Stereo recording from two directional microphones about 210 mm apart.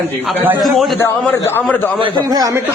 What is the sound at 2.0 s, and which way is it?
Speech, 20° right (ahead or behind).